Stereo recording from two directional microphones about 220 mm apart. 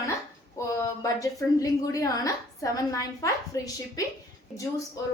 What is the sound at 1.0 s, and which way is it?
A woman's voice, 15° left (ahead or behind).